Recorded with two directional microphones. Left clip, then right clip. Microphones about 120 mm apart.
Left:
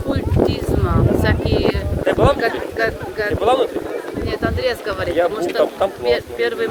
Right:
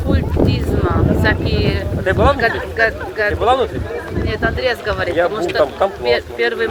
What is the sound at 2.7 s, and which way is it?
Speech, 20° left (ahead or behind).